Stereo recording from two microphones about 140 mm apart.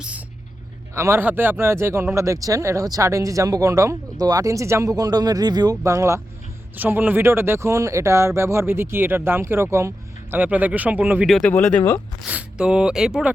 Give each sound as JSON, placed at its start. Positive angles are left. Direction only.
{"t": 0.9, "sound": "speech", "side_deg": -20}
{"t": 11.3, "sound": "speech", "side_deg": 0}
{"t": 11.5, "sound": "speech", "side_deg": 15}
{"t": 12.2, "sound": "speech", "side_deg": -10}